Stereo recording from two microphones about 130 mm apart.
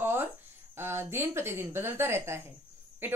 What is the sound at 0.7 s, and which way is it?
Speech, 20° right (ahead or behind).